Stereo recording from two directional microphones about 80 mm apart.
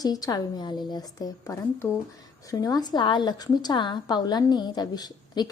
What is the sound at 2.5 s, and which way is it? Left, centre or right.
A woman's voice, left.